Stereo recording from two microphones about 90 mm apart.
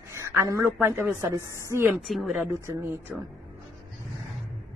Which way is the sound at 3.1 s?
10° right (ahead or behind).